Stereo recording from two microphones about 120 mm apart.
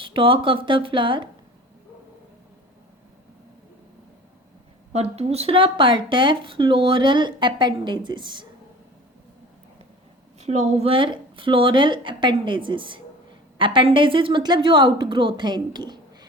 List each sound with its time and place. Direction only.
0.0 s speech: 45° right (ahead or behind)
4.9 s speech: 60° right (ahead or behind); by 8.4 s 40° right (ahead or behind)
10.4 s speech: 65° right (ahead or behind); by 16.0 s 35° right (ahead or behind)